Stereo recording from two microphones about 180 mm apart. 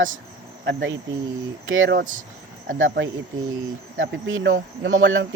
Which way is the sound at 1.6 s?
90° right.